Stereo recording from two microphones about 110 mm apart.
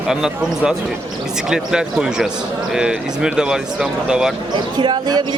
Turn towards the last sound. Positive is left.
turn(degrees=-40)  # may be behind; listen again after turning